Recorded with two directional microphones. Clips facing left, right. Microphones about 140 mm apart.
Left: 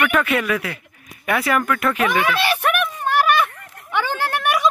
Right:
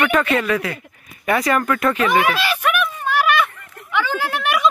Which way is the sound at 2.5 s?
60° left (ahead or behind).